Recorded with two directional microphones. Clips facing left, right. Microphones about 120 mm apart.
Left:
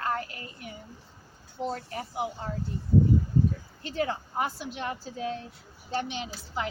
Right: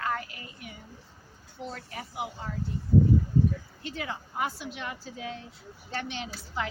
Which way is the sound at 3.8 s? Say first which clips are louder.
Left 7 dB; 40° left (ahead or behind).